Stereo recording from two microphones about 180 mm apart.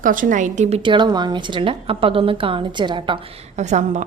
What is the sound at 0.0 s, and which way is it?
A woman's voice, 50° right (ahead or behind).